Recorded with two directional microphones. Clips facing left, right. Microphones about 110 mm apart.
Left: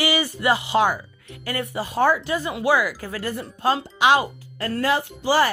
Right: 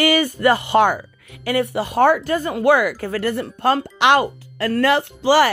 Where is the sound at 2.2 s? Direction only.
45° right (ahead or behind).